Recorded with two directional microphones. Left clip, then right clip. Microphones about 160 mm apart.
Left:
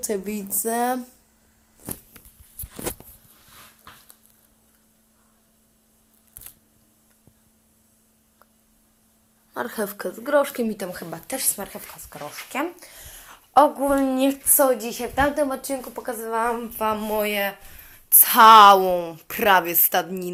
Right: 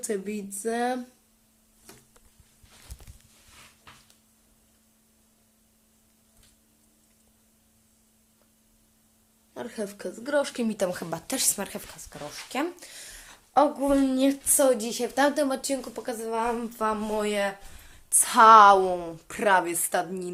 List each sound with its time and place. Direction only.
0.0 s speech: centre (ahead or behind)
9.6 s speech: 5° left (ahead or behind)
10.2 s speech: 25° right (ahead or behind)
10.6 s a woman's voice: 10° right (ahead or behind)
11.4 s speech: 30° right (ahead or behind)
11.9 s a woman's voice: 10° right (ahead or behind)
12.8 s a sound: 15° right (ahead or behind)
13.6 s a woman's voice: 15° right (ahead or behind)
14.6 s a woman's voice: 35° right (ahead or behind)
15.1 s speech: 50° right (ahead or behind)
15.4 s speech: 30° right (ahead or behind)
15.7 s a woman's voice: 15° right (ahead or behind); by 20.3 s 15° left (ahead or behind)